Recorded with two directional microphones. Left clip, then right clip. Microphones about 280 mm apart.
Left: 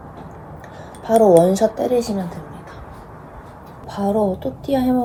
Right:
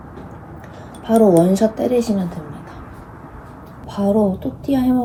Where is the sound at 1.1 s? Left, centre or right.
Centre.